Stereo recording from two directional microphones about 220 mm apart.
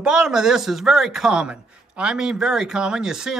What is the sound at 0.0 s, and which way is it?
Speech, 5° right (ahead or behind).